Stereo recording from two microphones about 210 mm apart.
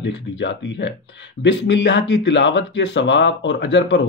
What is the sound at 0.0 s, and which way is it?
Speech, 55° left (ahead or behind).